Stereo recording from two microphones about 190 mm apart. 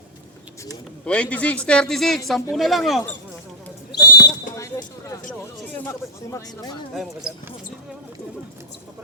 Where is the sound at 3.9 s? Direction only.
60° left (ahead or behind).